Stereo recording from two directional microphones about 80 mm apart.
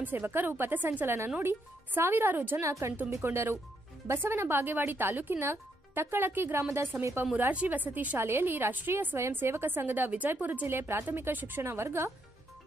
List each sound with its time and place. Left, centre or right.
0.0 s a woman's voice: right
2.6 s a woman's voice: right
7.3 s a woman's voice: right